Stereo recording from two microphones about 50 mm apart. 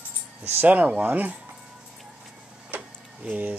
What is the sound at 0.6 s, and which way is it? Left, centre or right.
Speech, right.